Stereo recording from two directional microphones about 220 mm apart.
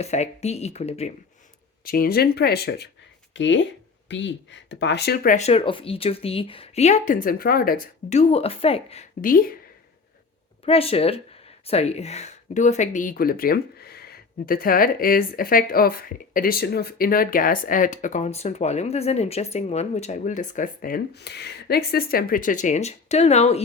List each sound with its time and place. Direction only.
0.0 s speech: 30° left (ahead or behind)
1.8 s speech: 45° left (ahead or behind)
10.7 s speech: 25° left (ahead or behind)